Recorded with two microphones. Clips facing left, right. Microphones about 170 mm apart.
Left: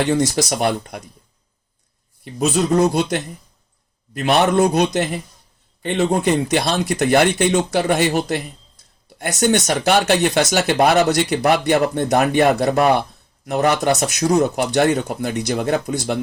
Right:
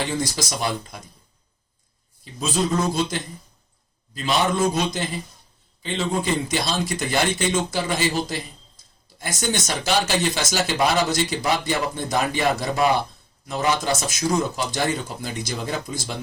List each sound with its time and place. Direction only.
0.0 s speech: 65° left (ahead or behind)
2.2 s speech: 70° left (ahead or behind)
2.6 s a man's voice: 40° left (ahead or behind)
2.9 s a man's voice: 65° left (ahead or behind)